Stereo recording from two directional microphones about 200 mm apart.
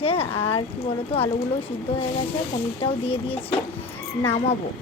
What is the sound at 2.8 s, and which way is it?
Speech, 30° left (ahead or behind).